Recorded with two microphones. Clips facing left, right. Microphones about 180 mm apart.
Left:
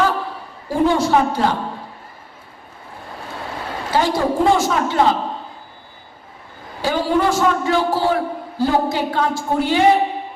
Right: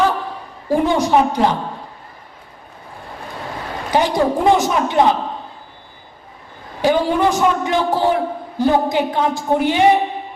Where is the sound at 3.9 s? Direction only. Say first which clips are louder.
Right 2 dB; 20° right (ahead or behind).